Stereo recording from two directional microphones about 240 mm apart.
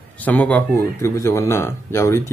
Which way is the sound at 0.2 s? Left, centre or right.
Centre.